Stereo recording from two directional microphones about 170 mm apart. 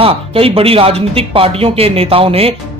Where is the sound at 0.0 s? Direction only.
35° right (ahead or behind).